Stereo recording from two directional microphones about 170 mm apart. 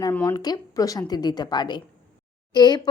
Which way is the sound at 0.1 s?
10° left (ahead or behind).